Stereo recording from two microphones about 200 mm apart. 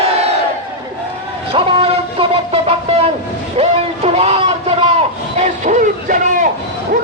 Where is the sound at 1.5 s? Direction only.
30° right (ahead or behind).